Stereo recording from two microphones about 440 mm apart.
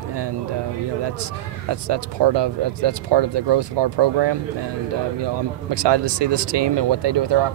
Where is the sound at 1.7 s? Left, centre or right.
Right.